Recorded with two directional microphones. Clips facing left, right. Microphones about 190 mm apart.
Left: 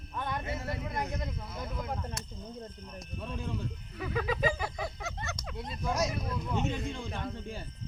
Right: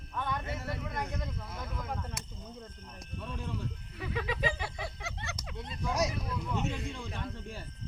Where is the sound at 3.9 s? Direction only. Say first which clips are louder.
Left 3 dB; 50° left (ahead or behind).